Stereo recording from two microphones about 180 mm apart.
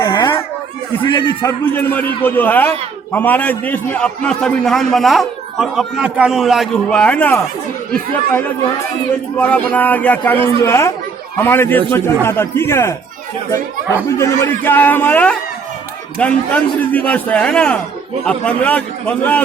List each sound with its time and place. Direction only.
0.0 s a sound: 25° left (ahead or behind)
1.0 s a man's voice: 25° left (ahead or behind)
1.7 s a man's voice: 10° left (ahead or behind)
14.2 s a man's voice: 15° left (ahead or behind)